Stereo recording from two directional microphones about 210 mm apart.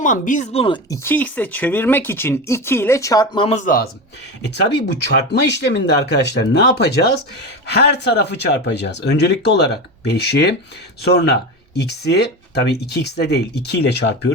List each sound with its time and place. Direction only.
0.0 s speech: 35° left (ahead or behind)
1.0 s speech: 10° left (ahead or behind); by 3.8 s 40° left (ahead or behind)
5.0 s speech: 50° left (ahead or behind)